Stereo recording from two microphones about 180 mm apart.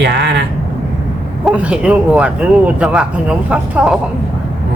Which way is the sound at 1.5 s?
5° right (ahead or behind).